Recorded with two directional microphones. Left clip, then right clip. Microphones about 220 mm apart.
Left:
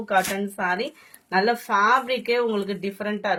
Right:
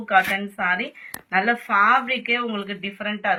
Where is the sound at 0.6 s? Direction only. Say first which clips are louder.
Even; 60° left (ahead or behind).